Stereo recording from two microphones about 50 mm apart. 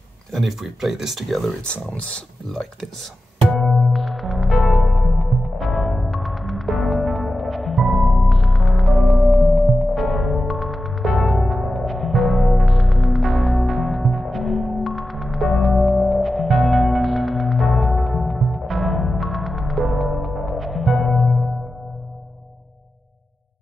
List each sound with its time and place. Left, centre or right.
0.3 s speech: centre
2.0 s speech: left
2.5 s speech: centre
3.4 s music: centre